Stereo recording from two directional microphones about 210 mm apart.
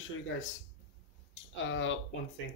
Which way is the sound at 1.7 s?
65° left (ahead or behind).